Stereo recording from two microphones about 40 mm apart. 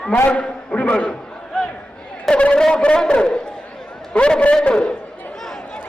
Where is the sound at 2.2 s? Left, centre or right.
Left.